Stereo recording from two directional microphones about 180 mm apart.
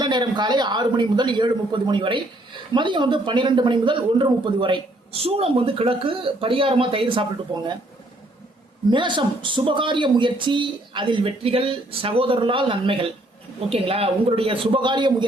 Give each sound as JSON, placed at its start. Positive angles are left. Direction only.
{"t": 0.0, "sound": "speech", "side_deg": -25}
{"t": 8.9, "sound": "a man's voice", "side_deg": -25}